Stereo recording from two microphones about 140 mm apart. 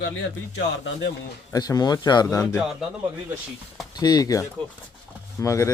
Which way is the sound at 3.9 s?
30° left (ahead or behind).